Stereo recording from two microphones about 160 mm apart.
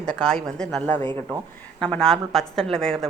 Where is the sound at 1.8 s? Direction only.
5° left (ahead or behind).